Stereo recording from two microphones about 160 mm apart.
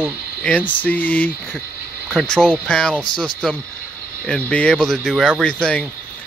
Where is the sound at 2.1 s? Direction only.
Centre (ahead or behind).